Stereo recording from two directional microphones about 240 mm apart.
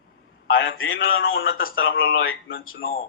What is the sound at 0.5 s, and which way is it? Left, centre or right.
A man's voice, left.